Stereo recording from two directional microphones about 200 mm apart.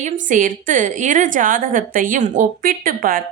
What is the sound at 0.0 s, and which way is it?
A woman's voice, 40° right (ahead or behind).